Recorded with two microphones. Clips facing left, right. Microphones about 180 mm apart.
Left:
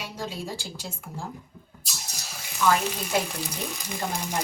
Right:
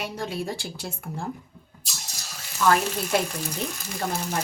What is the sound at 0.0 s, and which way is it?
A woman's voice, 60° right (ahead or behind).